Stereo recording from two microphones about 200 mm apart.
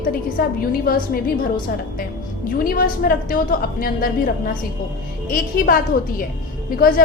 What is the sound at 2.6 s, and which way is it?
A woman's voice, 45° left (ahead or behind).